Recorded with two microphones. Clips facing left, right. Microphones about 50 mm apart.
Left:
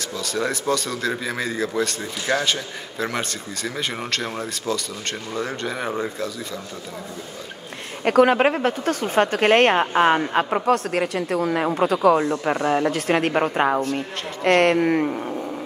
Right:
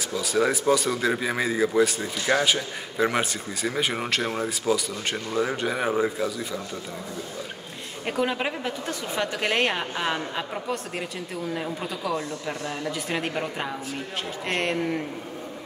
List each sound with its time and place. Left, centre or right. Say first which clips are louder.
0.1 s speech: right 2 dB; centre
8.0 s a woman's voice: left 10 dB; left